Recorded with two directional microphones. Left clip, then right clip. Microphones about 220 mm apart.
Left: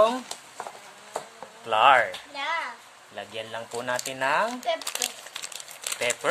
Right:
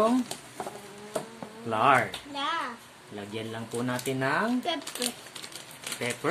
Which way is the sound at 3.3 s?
40° left (ahead or behind).